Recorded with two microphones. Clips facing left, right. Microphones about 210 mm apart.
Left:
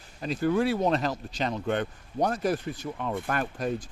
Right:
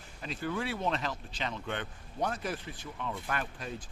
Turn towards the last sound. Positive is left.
turn(degrees=45)  # may be behind; listen again after turning